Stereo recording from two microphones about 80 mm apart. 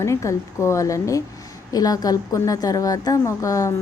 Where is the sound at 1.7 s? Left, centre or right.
Left.